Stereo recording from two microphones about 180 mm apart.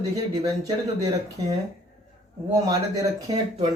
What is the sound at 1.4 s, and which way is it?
Speech, 20° right (ahead or behind).